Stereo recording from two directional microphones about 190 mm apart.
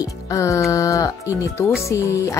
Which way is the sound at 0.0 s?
15° left (ahead or behind).